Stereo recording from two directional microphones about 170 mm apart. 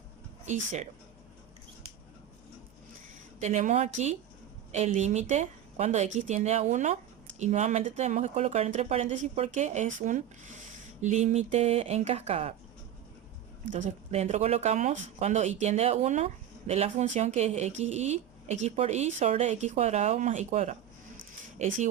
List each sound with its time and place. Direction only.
0.4 s speech: 45° right (ahead or behind)
3.4 s speech: 45° right (ahead or behind)
13.7 s speech: 45° right (ahead or behind)